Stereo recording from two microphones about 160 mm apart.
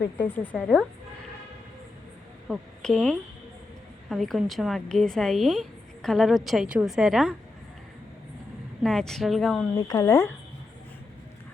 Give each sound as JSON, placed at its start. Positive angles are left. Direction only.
{"t": 0.2, "sound": "a woman's voice", "side_deg": 10}
{"t": 2.5, "sound": "a woman's voice", "side_deg": 5}
{"t": 8.8, "sound": "a woman's voice", "side_deg": 5}
{"t": 9.7, "sound": "speech", "side_deg": 25}